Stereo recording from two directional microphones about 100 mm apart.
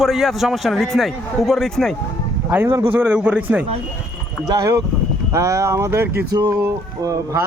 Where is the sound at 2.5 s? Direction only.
20° right (ahead or behind).